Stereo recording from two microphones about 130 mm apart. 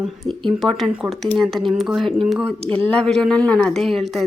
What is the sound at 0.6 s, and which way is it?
A woman's voice, centre (ahead or behind).